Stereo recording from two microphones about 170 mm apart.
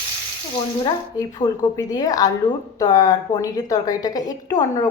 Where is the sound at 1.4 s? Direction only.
20° left (ahead or behind).